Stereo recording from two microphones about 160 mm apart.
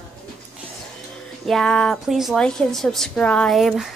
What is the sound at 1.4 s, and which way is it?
A woman's voice, centre (ahead or behind).